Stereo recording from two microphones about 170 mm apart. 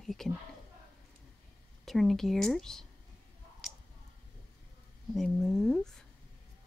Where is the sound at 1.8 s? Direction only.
Centre (ahead or behind).